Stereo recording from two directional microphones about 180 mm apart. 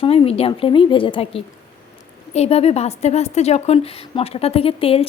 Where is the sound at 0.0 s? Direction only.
30° left (ahead or behind).